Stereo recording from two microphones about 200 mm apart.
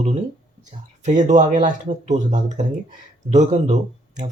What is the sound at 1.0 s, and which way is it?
Speech, 35° right (ahead or behind).